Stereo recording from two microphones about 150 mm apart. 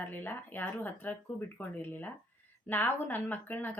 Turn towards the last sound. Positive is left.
turn(degrees=10)  # may be behind; listen again after turning